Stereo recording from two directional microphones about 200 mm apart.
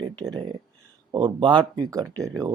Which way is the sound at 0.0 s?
20° right (ahead or behind).